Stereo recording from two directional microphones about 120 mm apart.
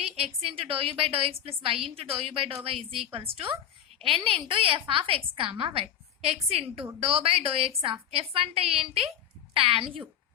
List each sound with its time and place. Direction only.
0.4 s a woman's voice: 50° right (ahead or behind)